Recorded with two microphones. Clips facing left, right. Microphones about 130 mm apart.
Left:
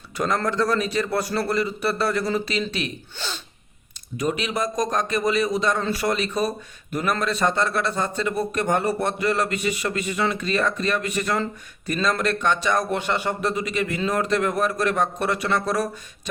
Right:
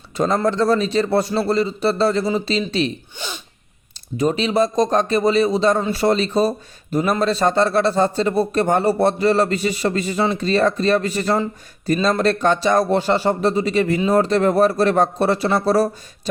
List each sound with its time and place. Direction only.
0.3 s speech: 25° right (ahead or behind)
3.2 s sneeze: 15° right (ahead or behind)
4.2 s speech: 30° right (ahead or behind)